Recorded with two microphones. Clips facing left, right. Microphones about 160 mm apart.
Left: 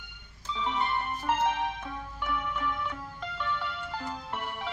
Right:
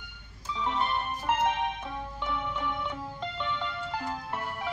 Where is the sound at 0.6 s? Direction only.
10° right (ahead or behind).